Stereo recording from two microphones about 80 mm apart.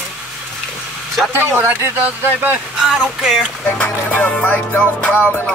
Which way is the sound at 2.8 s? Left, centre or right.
Centre.